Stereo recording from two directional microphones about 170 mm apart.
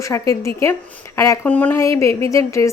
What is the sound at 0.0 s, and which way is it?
A woman's voice, 15° left (ahead or behind).